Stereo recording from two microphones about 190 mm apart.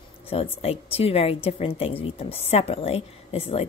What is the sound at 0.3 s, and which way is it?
A woman's voice, 30° left (ahead or behind).